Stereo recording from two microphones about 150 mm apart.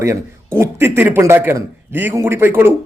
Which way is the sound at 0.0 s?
20° right (ahead or behind).